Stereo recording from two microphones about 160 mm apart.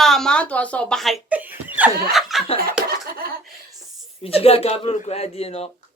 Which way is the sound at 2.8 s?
70° right (ahead or behind).